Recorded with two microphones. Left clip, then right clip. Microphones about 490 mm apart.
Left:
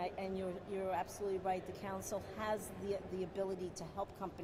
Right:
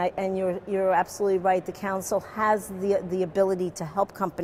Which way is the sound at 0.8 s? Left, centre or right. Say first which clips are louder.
Right 17 dB; right.